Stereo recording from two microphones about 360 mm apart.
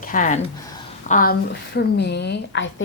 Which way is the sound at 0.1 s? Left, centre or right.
Left.